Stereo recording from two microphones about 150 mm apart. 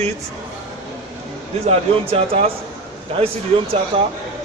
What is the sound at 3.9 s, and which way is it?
Speech, 35° right (ahead or behind).